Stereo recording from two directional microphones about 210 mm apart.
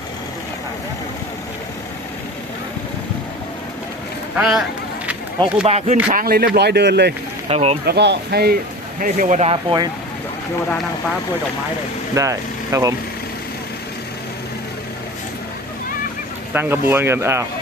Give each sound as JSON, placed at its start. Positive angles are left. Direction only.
{"t": 4.4, "sound": "speech", "side_deg": 0}
{"t": 5.6, "sound": "speech", "side_deg": -30}
{"t": 6.1, "sound": "speech", "side_deg": -45}
{"t": 7.5, "sound": "speech", "side_deg": -30}
{"t": 7.9, "sound": "speech", "side_deg": -50}
{"t": 9.0, "sound": "speech", "side_deg": -40}
{"t": 12.1, "sound": "speech", "side_deg": -15}
{"t": 16.6, "sound": "speech", "side_deg": -10}